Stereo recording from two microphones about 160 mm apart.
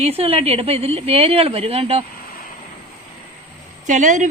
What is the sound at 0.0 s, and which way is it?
Speech, 40° right (ahead or behind).